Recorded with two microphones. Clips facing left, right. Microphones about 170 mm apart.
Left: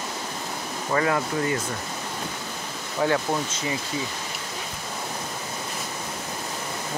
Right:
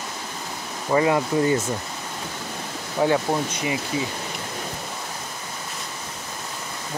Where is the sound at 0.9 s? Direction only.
20° right (ahead or behind).